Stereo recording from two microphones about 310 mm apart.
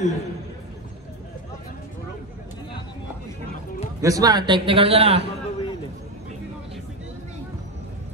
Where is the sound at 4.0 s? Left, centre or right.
Centre.